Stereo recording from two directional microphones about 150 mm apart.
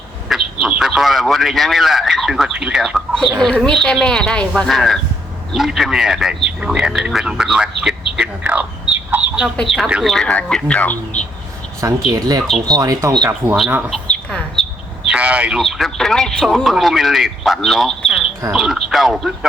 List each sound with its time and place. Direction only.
0.3 s a man's voice: centre (ahead or behind)
8.1 s bird: 5° right (ahead or behind)
9.6 s speech: centre (ahead or behind)
11.8 s speech: 20° right (ahead or behind)
13.7 s speech: 10° right (ahead or behind)
13.9 s speech: 5° left (ahead or behind)